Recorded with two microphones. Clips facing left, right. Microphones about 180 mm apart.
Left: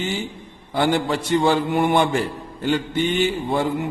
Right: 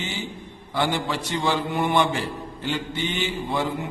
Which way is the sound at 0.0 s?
50° left (ahead or behind).